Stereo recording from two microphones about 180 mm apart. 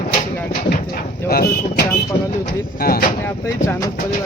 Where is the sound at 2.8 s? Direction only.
55° left (ahead or behind).